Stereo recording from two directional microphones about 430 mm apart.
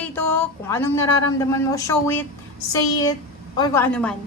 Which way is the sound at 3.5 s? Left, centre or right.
Centre.